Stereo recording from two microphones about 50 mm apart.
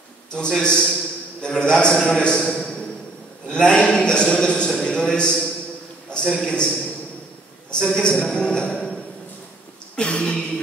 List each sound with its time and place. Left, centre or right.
0.3 s a man's voice: centre
6.2 s a man's voice: centre
6.5 s a man's voice: left
9.9 s a sound: centre